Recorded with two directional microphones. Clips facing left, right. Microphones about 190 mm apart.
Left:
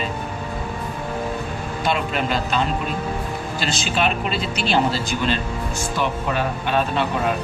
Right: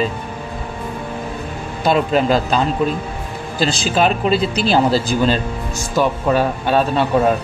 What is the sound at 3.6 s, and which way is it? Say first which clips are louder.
Speech: right 7 dB; 35° right (ahead or behind).